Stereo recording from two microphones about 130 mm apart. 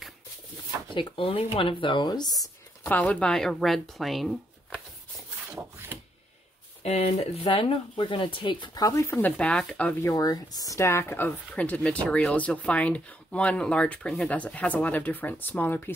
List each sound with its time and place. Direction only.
0.8 s speech: 40° left (ahead or behind)
2.8 s speech: 10° left (ahead or behind)
5.5 s wood: 15° right (ahead or behind)
6.8 s speech: 55° left (ahead or behind); by 9.9 s 5° left (ahead or behind)
10.0 s speech: 25° left (ahead or behind)